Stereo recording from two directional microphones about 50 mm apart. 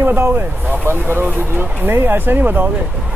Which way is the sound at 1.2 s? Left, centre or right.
Right.